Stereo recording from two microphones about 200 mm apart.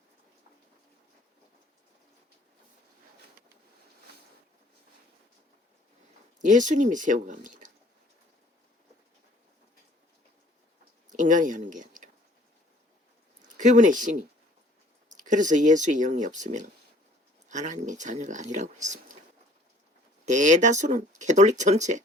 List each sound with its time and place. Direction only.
6.4 s speech: 40° right (ahead or behind)
11.1 s a sound: 40° right (ahead or behind)
13.6 s speech: 40° right (ahead or behind)
20.2 s speech: 40° right (ahead or behind)